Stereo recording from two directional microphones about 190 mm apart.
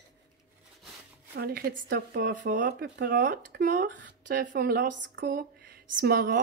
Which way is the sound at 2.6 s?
55° right (ahead or behind).